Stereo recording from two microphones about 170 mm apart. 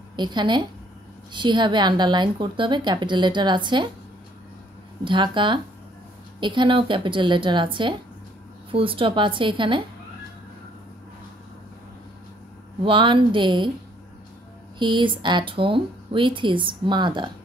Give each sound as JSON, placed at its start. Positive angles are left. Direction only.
{"t": 0.1, "sound": "a woman's voice", "side_deg": -25}
{"t": 5.0, "sound": "a woman's voice", "side_deg": -30}
{"t": 12.8, "sound": "a woman's voice", "side_deg": -30}
{"t": 14.8, "sound": "a woman's voice", "side_deg": -25}